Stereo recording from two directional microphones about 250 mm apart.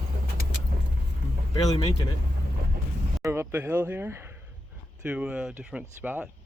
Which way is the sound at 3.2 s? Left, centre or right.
Centre.